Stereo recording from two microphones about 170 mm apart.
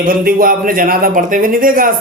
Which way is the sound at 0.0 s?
55° right (ahead or behind).